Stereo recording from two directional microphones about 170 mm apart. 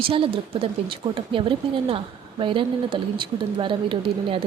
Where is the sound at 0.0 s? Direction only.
30° right (ahead or behind).